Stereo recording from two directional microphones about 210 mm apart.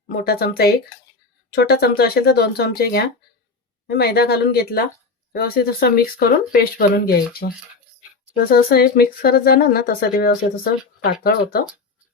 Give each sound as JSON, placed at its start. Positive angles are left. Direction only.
{"t": 0.2, "sound": "speech", "side_deg": 50}